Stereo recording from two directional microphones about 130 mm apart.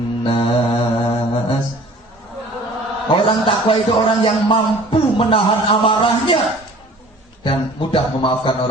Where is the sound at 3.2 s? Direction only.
40° left (ahead or behind).